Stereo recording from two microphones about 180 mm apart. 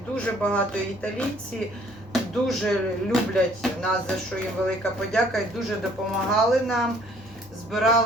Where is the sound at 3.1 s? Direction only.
5° left (ahead or behind).